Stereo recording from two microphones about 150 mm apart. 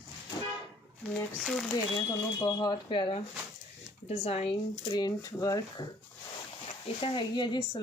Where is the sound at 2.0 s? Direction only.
25° left (ahead or behind); by 4.4 s 45° left (ahead or behind).